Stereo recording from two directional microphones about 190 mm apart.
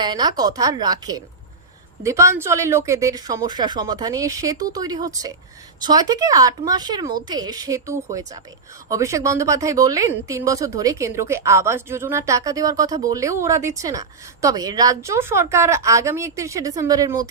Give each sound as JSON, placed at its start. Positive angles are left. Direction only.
{"t": 0.0, "sound": "a woman's voice", "side_deg": -20}